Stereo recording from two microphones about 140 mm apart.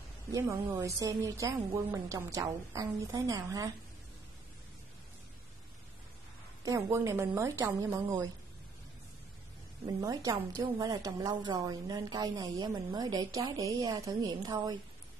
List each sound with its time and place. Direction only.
0.3 s a woman's voice: 25° right (ahead or behind)
6.6 s a woman's voice: 20° right (ahead or behind)
9.9 s a woman's voice: 25° right (ahead or behind)